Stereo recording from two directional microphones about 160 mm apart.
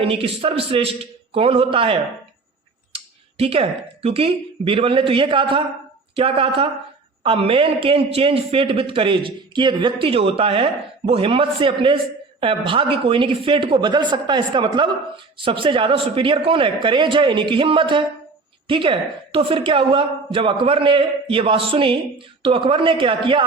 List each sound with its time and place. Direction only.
0.0 s speech: 35° right (ahead or behind)